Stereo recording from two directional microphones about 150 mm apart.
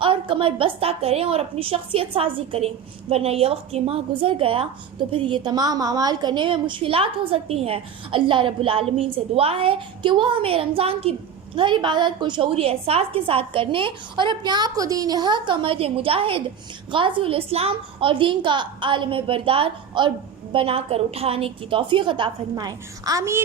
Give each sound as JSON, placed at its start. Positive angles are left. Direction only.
{"t": 0.0, "sound": "a woman's voice", "side_deg": -35}